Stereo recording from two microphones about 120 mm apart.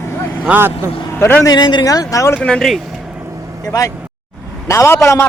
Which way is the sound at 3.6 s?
30° left (ahead or behind).